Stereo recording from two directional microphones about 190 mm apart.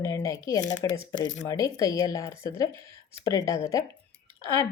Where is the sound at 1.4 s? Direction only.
20° left (ahead or behind).